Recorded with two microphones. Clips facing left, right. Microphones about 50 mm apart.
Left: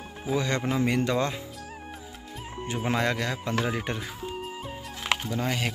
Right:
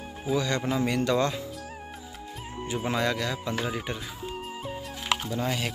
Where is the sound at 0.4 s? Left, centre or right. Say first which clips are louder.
Left 1 dB; left.